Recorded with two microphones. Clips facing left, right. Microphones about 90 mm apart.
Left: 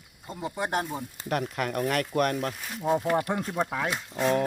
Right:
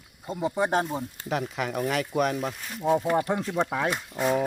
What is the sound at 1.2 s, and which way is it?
Speech, centre (ahead or behind).